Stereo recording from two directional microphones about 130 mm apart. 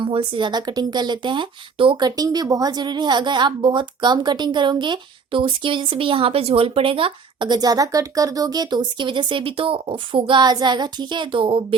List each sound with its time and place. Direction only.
0.0 s speech: 40° right (ahead or behind)